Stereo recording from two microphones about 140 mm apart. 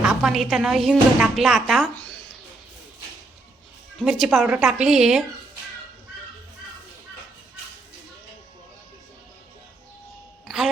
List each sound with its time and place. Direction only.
0.0 s a woman's voice: 5° right (ahead or behind)
4.0 s a woman's voice: centre (ahead or behind)